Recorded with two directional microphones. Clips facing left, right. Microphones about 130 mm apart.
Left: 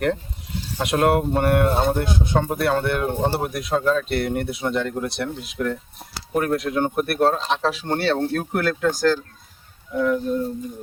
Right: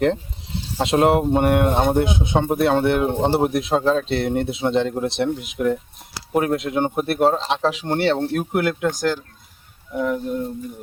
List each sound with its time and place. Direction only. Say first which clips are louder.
0.8 s speech: right 2 dB; 25° right (ahead or behind)